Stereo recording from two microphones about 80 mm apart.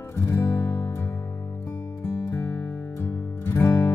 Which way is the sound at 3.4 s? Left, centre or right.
Left.